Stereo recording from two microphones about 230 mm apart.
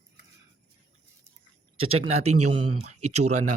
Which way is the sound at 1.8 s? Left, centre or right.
Right.